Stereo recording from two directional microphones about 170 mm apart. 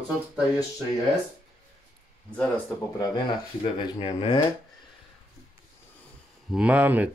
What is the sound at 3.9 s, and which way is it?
Speech, 30° left (ahead or behind).